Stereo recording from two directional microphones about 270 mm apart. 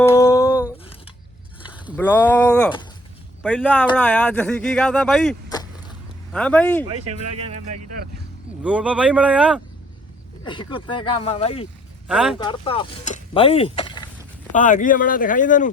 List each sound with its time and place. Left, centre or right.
0.0 s a sound: centre
2.0 s speech: centre
7.0 s speech: right
8.6 s speech: centre
10.4 s speech: centre
12.0 s speech: centre
12.4 s speech: centre
14.5 s speech: left